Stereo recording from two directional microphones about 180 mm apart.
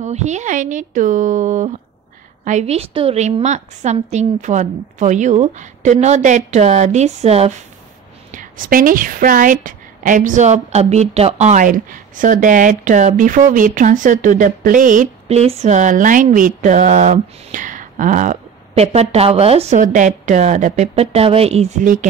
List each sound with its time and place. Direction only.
0.0 s a woman's voice: 40° right (ahead or behind)
8.3 s a woman's voice: 50° right (ahead or behind)